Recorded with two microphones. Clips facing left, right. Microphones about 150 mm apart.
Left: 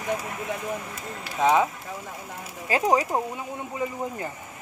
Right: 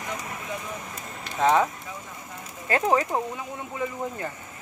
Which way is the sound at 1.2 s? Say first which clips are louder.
Even; 5° left (ahead or behind).